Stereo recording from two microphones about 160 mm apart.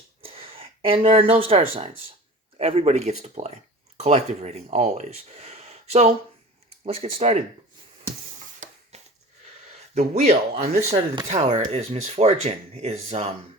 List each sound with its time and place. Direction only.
0.3 s speech: 35° right (ahead or behind)
8.6 s a sound: 50° right (ahead or behind)
9.9 s speech: 45° right (ahead or behind)
10.9 s speech: 30° right (ahead or behind)
11.3 s speech: 45° right (ahead or behind)